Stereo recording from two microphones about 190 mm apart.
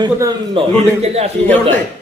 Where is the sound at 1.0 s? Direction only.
35° right (ahead or behind).